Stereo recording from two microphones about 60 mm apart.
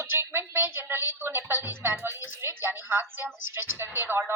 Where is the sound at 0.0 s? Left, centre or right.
Right.